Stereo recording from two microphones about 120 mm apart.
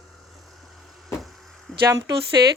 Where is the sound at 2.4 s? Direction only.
35° right (ahead or behind).